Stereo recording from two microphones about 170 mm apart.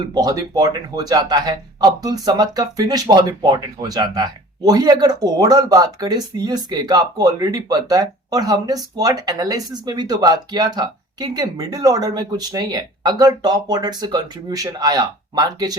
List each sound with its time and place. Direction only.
0.1 s speech: 20° right (ahead or behind)